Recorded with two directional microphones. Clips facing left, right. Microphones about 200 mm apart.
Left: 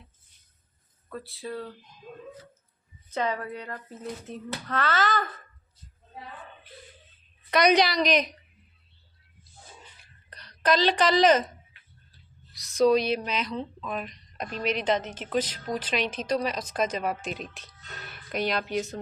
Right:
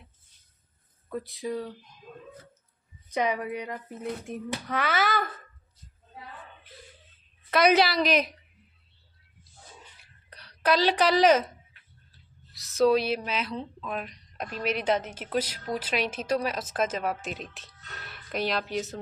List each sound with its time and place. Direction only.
1.1 s speech: 15° right (ahead or behind)
3.1 s speech: 15° right (ahead or behind)
7.5 s speech: 5° right (ahead or behind)
10.0 s a sound: 10° right (ahead or behind)
12.5 s speech: 5° right (ahead or behind)